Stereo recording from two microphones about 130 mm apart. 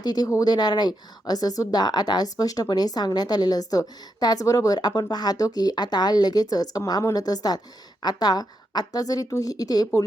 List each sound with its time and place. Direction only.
0.0 s a woman's voice: 30° left (ahead or behind)